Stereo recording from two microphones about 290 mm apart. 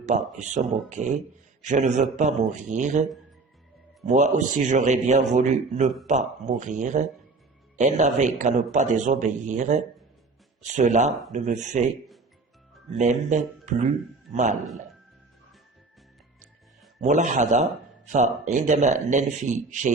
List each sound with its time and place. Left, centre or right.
0.0 s a man's voice: right
13.0 s a man's voice: right
17.0 s a man's voice: right